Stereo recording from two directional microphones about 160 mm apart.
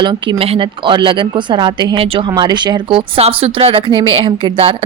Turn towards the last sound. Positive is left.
turn(degrees=-35)  # may be behind; listen again after turning